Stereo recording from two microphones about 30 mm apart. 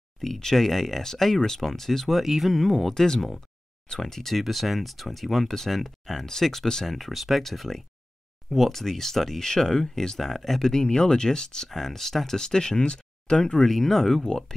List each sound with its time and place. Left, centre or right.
0.2 s speech: centre
2.2 s speech: centre
2.9 s speech: centre
4.4 s speech: centre
9.4 s speech: centre
10.2 s speech: centre
10.6 s speech: left
11.7 s speech: centre
12.4 s speech: left
13.6 s speech: centre